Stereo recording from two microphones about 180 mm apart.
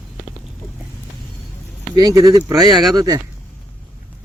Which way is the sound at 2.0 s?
20° right (ahead or behind).